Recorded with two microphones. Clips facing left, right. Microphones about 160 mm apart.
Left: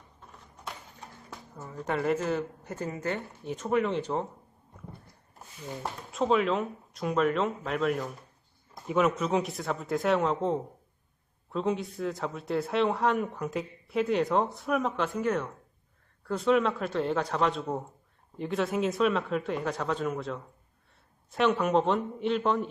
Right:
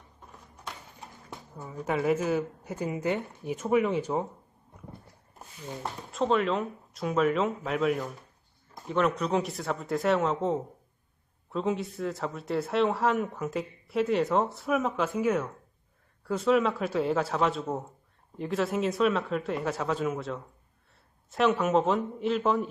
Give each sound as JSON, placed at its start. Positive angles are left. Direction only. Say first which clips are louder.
{"t": 1.6, "sound": "a woman's voice", "louder": "right 2 dB", "side_deg": -5}
{"t": 5.8, "sound": "speech", "louder": "even", "side_deg": 0}